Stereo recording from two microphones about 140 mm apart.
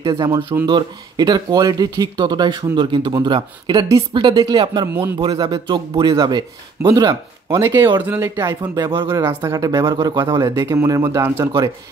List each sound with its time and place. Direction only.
0.7 s speech: 30° right (ahead or behind)
4.8 s a man's voice: 15° right (ahead or behind)
5.2 s a man's voice: 30° right (ahead or behind)